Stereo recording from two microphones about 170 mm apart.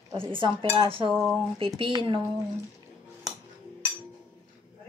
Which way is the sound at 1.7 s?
30° right (ahead or behind).